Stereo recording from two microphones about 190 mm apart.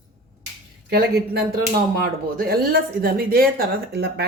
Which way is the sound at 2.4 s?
50° right (ahead or behind).